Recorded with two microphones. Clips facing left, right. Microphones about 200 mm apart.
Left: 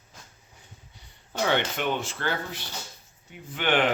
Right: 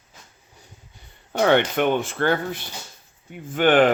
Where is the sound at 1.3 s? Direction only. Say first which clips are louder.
Right 7 dB; 60° right (ahead or behind).